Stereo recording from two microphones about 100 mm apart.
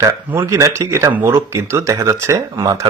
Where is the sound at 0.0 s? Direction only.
30° right (ahead or behind).